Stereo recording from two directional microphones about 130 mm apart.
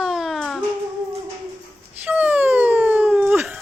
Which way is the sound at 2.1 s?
10° right (ahead or behind).